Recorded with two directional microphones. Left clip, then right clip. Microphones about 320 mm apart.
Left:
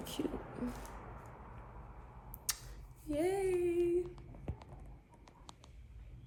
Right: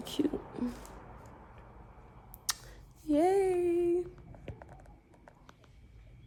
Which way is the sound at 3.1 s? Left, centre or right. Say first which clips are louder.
Right 7 dB; right.